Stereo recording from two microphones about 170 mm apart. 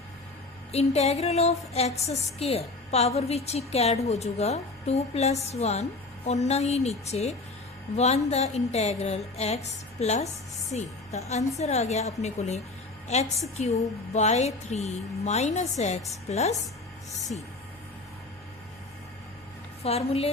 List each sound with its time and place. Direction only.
0.7 s a woman's voice: 40° left (ahead or behind)
19.8 s a woman's voice: 35° left (ahead or behind)